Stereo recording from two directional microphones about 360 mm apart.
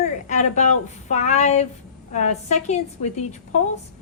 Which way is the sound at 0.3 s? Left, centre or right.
Centre.